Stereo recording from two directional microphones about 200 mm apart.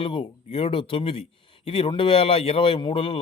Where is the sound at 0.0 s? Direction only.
25° left (ahead or behind).